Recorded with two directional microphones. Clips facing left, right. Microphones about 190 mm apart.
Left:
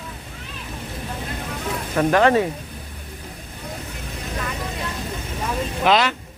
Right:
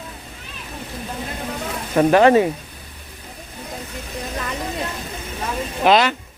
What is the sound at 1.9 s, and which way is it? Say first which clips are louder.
Speech: right 4 dB; 20° right (ahead or behind).